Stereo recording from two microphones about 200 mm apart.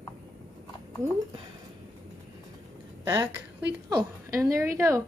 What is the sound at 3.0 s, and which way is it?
Speech, 20° right (ahead or behind).